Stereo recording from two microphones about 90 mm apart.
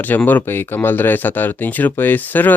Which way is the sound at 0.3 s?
20° left (ahead or behind).